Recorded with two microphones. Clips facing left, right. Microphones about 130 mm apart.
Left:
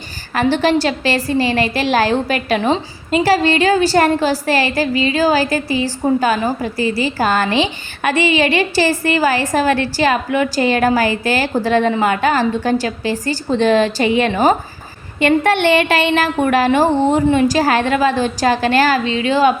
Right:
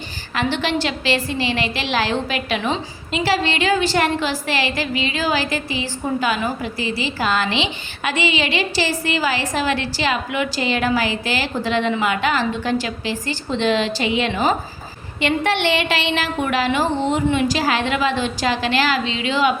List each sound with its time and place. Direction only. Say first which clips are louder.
0.3 s a woman's voice: left 7 dB; 40° left (ahead or behind)